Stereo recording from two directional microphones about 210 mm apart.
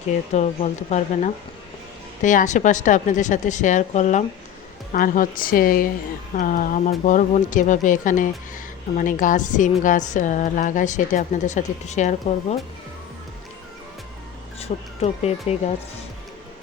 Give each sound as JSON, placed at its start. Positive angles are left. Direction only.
{"t": 0.3, "sound": "a woman's voice", "side_deg": 35}
{"t": 14.6, "sound": "speech", "side_deg": 30}